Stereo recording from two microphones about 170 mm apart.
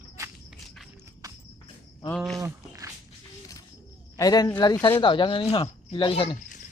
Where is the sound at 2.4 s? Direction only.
20° right (ahead or behind).